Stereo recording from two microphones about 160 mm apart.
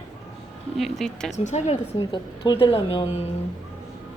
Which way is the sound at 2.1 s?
30° left (ahead or behind).